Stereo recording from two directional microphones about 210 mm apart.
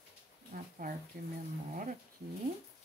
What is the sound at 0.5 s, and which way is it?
Speech, 40° right (ahead or behind).